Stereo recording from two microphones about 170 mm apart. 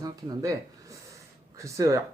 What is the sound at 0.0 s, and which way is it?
Speech, 20° right (ahead or behind).